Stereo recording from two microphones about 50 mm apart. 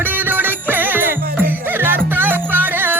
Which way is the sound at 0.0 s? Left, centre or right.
Right.